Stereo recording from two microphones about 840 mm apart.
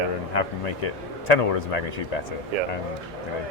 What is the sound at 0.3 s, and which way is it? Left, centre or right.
Speech, left.